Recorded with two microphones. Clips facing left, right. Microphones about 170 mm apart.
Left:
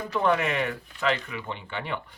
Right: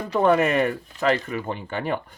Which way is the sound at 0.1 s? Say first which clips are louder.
Right 6 dB; 45° right (ahead or behind).